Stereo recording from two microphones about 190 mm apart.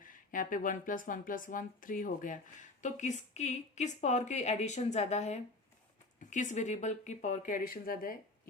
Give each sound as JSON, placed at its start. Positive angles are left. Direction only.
{"t": 0.0, "sound": "speech", "side_deg": 45}